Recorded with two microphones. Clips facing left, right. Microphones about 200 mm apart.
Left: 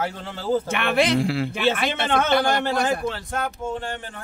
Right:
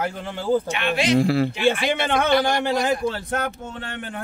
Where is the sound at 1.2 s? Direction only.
40° right (ahead or behind).